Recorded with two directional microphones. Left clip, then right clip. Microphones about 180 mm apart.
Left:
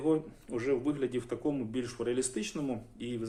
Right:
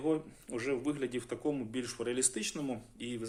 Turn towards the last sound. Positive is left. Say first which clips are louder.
# left 2 dB
turn(degrees=-20)  # may be behind; listen again after turning